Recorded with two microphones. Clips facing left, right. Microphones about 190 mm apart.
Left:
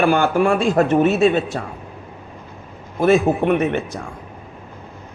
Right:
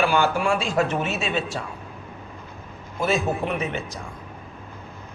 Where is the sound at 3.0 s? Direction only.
55° left (ahead or behind).